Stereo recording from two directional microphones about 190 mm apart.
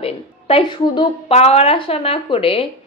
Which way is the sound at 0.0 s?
30° left (ahead or behind).